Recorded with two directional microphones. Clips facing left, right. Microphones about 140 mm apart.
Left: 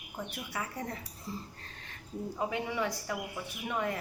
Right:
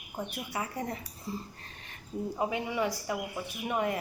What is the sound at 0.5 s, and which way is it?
Speech, 15° right (ahead or behind).